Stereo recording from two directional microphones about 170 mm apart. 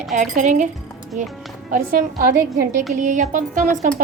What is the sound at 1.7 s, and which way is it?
A woman's voice, 55° right (ahead or behind).